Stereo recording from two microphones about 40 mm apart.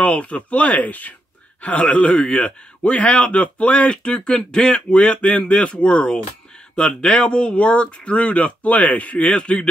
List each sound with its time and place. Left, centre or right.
0.0 s a man's voice: left
1.9 s a man's voice: left
4.9 s speech: left